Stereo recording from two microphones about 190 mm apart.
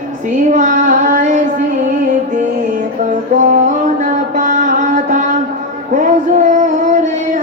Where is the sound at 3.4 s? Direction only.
40° right (ahead or behind).